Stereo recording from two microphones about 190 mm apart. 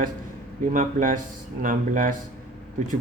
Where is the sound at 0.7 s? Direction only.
45° right (ahead or behind).